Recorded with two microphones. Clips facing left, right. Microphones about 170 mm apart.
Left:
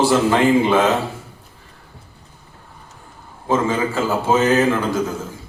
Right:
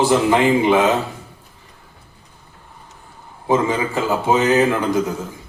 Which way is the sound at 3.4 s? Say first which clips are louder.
Right 1 dB; 15° right (ahead or behind).